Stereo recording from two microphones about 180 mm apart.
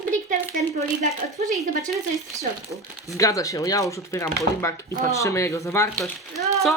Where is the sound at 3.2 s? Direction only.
20° left (ahead or behind).